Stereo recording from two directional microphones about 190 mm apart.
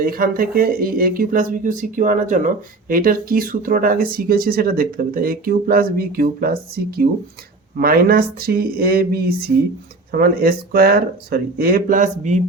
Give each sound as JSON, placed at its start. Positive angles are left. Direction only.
{"t": 0.0, "sound": "speech", "side_deg": -50}